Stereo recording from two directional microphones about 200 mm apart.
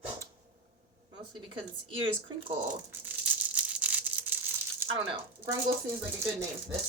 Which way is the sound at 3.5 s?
5° right (ahead or behind).